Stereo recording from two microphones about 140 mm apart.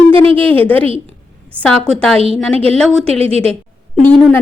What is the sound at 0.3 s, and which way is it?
A woman's voice, 10° left (ahead or behind).